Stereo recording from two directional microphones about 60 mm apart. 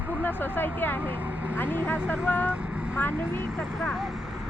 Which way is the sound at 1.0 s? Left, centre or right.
Right.